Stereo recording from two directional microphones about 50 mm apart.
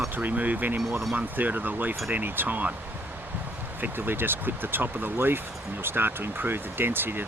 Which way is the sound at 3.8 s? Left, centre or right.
Right.